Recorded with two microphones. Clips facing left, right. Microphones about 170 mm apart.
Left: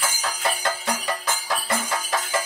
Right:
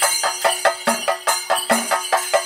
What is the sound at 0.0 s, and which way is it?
Music, 70° right (ahead or behind).